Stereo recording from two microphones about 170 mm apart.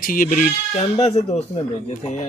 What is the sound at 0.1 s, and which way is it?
Speech, 55° left (ahead or behind).